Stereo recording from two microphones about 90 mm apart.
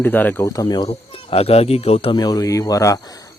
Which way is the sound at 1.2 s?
90° left.